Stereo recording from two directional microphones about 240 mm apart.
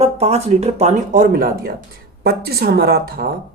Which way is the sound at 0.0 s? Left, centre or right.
Right.